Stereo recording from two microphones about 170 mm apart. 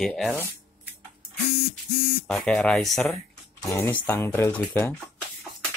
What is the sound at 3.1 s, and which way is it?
Speech, 15° left (ahead or behind).